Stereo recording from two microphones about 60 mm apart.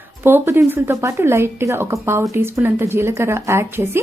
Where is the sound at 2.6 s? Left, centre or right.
Right.